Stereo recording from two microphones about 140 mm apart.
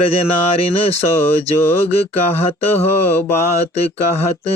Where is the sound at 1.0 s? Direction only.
15° left (ahead or behind).